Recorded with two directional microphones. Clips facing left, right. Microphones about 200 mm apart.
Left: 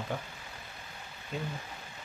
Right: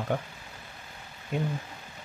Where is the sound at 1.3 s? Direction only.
60° right (ahead or behind).